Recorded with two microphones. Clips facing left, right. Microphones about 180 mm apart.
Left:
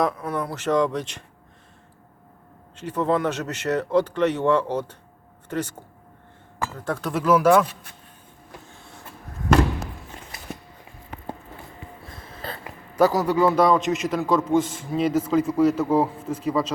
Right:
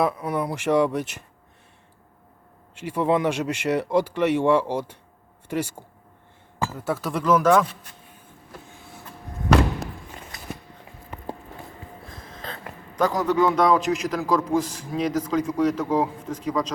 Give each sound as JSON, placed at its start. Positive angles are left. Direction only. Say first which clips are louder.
{"t": 0.0, "sound": "speech", "louder": "right 1 dB", "side_deg": -10}
{"t": 2.7, "sound": "a man's voice", "louder": "right 1 dB", "side_deg": -10}
{"t": 12.0, "sound": "a sound", "louder": "left 3 dB", "side_deg": 5}
{"t": 13.0, "sound": "a man's voice", "louder": "left 2 dB", "side_deg": 5}